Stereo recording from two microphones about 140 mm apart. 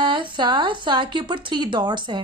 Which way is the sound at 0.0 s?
35° right (ahead or behind).